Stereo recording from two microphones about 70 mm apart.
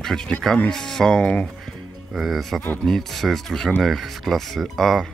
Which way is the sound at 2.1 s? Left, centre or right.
Centre.